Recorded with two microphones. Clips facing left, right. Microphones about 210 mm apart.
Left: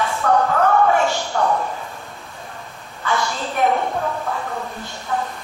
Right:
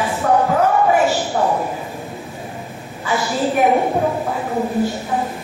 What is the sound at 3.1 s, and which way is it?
Speech, 5° right (ahead or behind).